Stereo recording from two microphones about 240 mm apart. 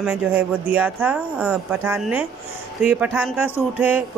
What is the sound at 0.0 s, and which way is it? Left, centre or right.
A man's voice, centre.